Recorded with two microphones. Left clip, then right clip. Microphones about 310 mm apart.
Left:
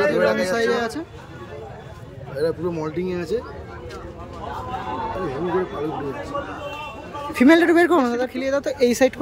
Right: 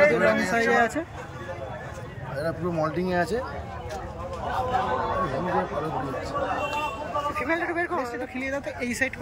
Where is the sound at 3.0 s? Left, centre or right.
Centre.